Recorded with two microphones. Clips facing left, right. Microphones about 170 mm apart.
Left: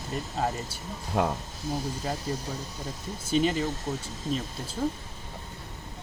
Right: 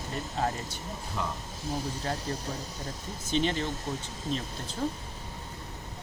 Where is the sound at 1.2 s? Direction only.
60° left (ahead or behind).